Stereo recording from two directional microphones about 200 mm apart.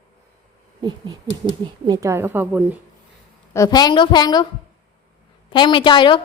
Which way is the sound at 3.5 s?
15° left (ahead or behind).